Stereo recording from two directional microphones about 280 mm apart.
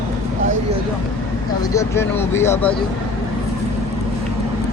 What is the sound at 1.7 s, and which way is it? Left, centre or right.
Speech, centre.